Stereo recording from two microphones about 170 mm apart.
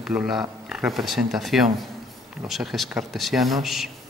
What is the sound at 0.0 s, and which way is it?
Speech, 5° right (ahead or behind).